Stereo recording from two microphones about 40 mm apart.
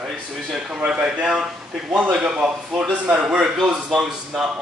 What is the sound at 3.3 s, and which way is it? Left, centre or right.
Speech, centre.